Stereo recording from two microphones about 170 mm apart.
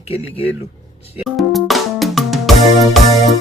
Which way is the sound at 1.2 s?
Centre (ahead or behind).